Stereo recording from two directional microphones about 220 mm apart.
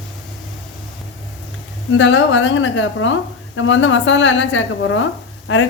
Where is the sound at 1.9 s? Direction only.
60° left (ahead or behind).